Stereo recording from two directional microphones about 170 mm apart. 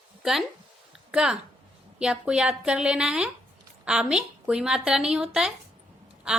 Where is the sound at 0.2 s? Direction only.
Centre (ahead or behind).